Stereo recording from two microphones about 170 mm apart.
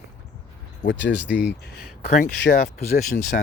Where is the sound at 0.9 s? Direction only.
90° left.